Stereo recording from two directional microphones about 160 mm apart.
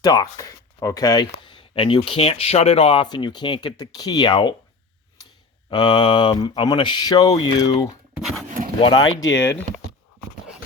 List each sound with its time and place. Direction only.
0.0 s speech: 25° left (ahead or behind)
5.7 s speech: 30° left (ahead or behind)
8.4 s a sound: 55° right (ahead or behind)
8.8 s speech: 25° left (ahead or behind)